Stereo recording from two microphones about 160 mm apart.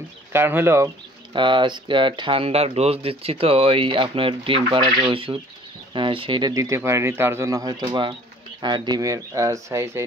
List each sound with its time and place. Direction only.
0.3 s speech: 15° right (ahead or behind)
1.3 s speech: 30° right (ahead or behind)